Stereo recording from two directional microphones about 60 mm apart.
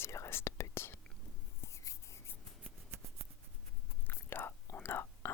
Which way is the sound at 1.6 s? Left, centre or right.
Left.